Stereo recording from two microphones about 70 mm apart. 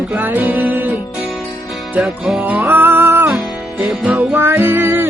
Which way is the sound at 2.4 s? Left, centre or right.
Right.